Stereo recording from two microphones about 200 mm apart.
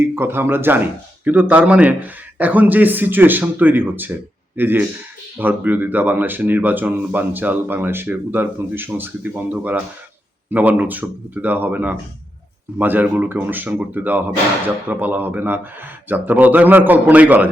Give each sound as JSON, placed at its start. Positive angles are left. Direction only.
{"t": 0.2, "sound": "speech", "side_deg": -10}